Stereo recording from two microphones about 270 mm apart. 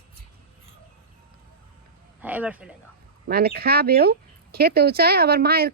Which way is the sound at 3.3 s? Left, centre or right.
Right.